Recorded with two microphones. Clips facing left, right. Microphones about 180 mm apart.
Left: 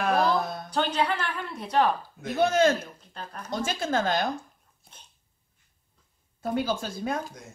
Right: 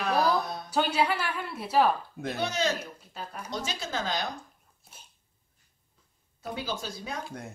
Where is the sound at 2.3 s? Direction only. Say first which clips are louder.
Left 8 dB; 50° left (ahead or behind).